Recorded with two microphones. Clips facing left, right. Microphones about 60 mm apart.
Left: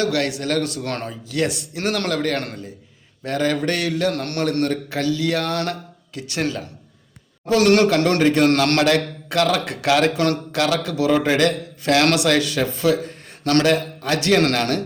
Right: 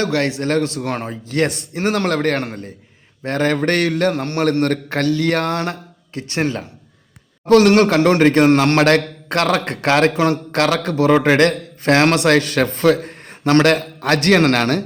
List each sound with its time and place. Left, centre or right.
0.0 s a man's voice: right
1.8 s a man's voice: right
2.0 s a man's voice: right
4.1 s a man's voice: right
4.6 s a man's voice: right
5.5 s a man's voice: right
7.4 s a man's voice: right
7.9 s a man's voice: right
8.2 s a man's voice: right
8.5 s a man's voice: right
8.8 s a man's voice: right
14.3 s a man's voice: right